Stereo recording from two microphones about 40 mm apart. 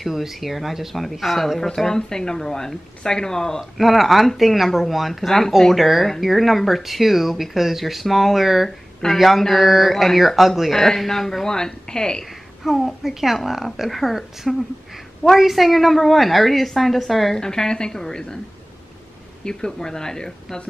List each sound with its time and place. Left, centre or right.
0.0 s speech: centre
2.0 s speech: centre
3.7 s speech: centre
8.6 s speech: centre
12.6 s speech: centre
17.4 s speech: centre
19.4 s speech: centre